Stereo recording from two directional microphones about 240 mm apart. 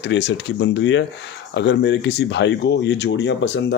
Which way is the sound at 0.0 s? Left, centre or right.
Left.